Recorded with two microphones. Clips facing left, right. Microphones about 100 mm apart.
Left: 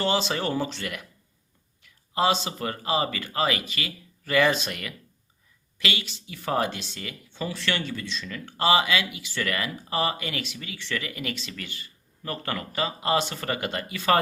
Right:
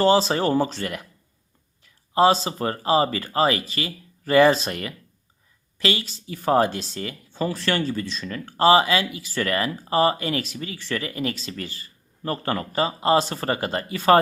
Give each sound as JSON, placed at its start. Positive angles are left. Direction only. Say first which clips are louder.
{"t": 0.0, "sound": "speech", "louder": "right 7 dB", "side_deg": -35}